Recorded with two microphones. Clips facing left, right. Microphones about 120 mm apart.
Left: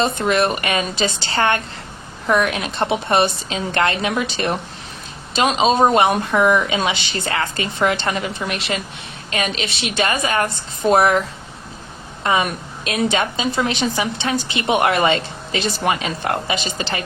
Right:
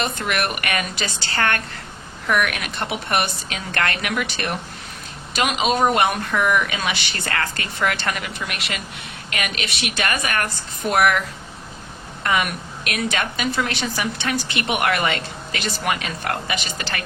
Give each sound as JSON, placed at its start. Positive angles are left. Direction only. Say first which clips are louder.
{"t": 0.0, "sound": "speech", "louder": "left 6 dB", "side_deg": 25}
{"t": 12.2, "sound": "speech", "louder": "left 3 dB", "side_deg": 25}